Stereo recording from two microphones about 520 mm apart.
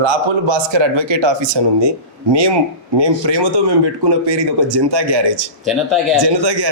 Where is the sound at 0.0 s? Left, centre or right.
Right.